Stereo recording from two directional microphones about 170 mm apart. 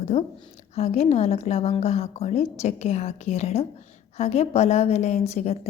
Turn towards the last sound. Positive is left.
turn(degrees=40)  # may be behind; listen again after turning